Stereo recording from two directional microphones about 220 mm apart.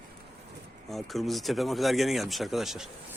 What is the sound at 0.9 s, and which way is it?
Speech, centre (ahead or behind).